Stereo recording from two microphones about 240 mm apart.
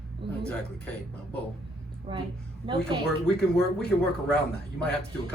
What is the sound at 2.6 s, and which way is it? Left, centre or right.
Speech, right.